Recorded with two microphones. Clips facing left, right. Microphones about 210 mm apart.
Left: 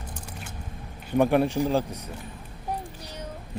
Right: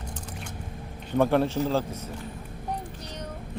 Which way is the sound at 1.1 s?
15° left (ahead or behind).